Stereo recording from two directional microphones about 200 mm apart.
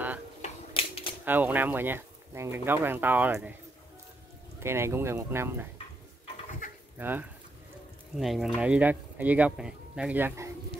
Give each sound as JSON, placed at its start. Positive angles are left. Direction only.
{"t": 0.4, "sound": "a sound", "side_deg": 30}
{"t": 1.2, "sound": "speech", "side_deg": -10}
{"t": 4.6, "sound": "speech", "side_deg": -15}
{"t": 7.0, "sound": "speech", "side_deg": -10}